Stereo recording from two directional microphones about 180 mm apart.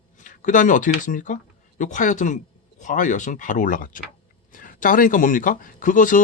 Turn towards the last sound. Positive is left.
turn(degrees=45)  # may be behind; listen again after turning